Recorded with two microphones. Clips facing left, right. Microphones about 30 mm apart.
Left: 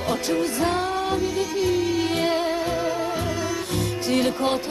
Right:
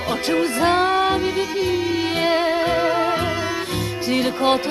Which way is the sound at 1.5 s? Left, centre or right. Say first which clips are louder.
Right 1 dB; right.